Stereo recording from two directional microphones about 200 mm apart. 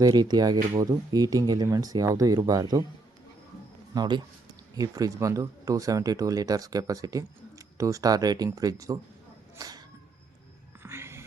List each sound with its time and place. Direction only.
0.0 s speech: 20° right (ahead or behind)
3.9 s speech: 20° right (ahead or behind)
10.8 s music: 10° right (ahead or behind)